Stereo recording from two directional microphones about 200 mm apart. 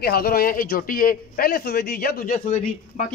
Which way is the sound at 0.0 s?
50° left (ahead or behind).